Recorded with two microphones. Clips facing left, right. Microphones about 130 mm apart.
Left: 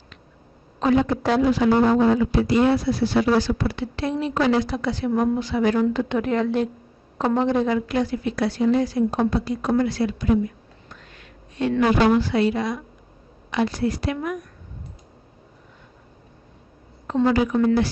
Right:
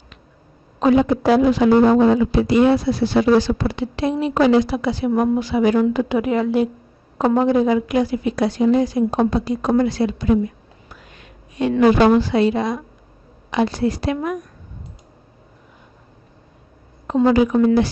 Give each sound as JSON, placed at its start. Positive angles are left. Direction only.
{"t": 0.7, "sound": "a man's voice", "side_deg": -15}
{"t": 10.9, "sound": "a sound", "side_deg": -15}
{"t": 12.1, "sound": "a woman's voice", "side_deg": -25}
{"t": 17.1, "sound": "a woman's voice", "side_deg": -20}